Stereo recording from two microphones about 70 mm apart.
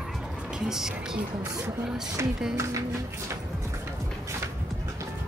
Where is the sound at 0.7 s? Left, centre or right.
Centre.